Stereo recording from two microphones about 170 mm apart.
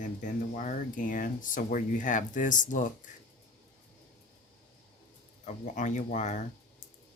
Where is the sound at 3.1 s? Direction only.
45° left (ahead or behind).